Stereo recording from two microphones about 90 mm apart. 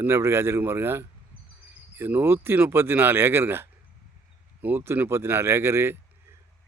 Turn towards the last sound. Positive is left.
turn(degrees=-30)  # may be behind; listen again after turning